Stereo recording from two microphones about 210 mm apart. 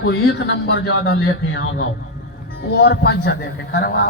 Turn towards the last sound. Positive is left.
turn(degrees=45)  # may be behind; listen again after turning